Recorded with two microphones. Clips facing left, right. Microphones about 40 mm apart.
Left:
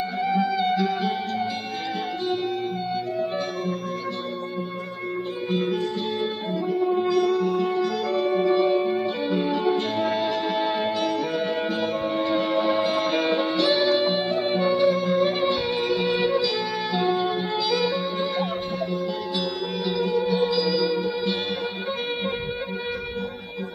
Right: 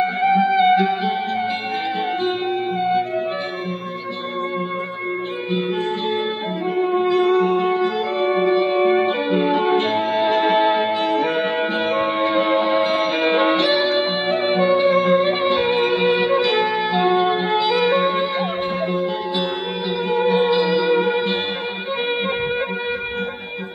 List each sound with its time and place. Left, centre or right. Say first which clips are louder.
0.0 s music: right 7 dB; right
2.8 s music: right 7 dB; right
6.7 s music: right 4 dB; right
8.8 s music: right 7 dB; right
9.8 s music: right 5 dB; centre
11.2 s music: right 5 dB; right
12.6 s music: right 4 dB; centre
14.1 s music: right 4 dB; right
16.3 s music: right 6 dB; right
16.7 s music: right 6 dB; right
20.1 s music: right 7 dB; right